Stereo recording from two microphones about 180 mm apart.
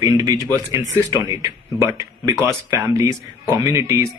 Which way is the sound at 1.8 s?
15° right (ahead or behind).